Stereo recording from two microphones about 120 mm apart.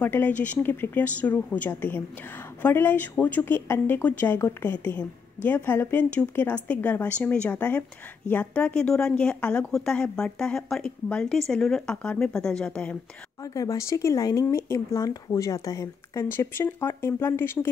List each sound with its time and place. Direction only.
0.0 s speech: 15° left (ahead or behind)
13.4 s speech: 30° left (ahead or behind)